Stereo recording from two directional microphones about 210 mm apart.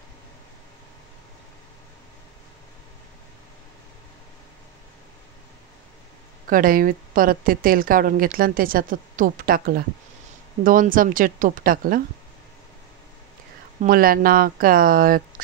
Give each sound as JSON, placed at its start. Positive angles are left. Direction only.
{"t": 6.5, "sound": "a woman's voice", "side_deg": -40}
{"t": 13.7, "sound": "a woman's voice", "side_deg": -45}